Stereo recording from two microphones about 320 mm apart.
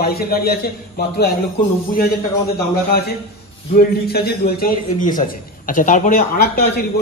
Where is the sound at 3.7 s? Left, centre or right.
Left.